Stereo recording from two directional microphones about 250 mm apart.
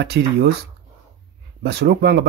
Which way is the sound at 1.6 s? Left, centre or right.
Right.